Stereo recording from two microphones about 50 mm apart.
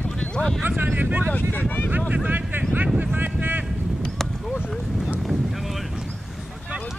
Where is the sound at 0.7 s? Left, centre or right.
Right.